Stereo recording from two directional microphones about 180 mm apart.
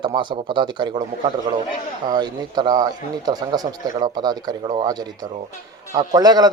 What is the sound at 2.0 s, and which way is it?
A man's voice, 25° right (ahead or behind).